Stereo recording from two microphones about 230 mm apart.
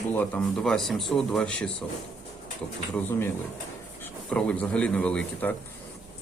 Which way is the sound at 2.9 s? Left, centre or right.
Centre.